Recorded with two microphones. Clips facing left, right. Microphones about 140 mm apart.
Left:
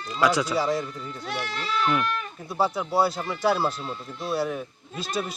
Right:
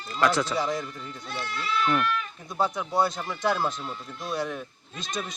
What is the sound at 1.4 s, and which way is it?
Speech, 85° left.